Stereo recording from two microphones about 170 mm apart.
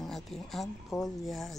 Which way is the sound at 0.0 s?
Centre (ahead or behind).